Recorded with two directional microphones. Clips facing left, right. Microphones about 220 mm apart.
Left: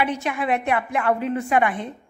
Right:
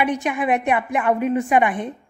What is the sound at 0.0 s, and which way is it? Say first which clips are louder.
A woman's voice: right 3 dB; 15° right (ahead or behind).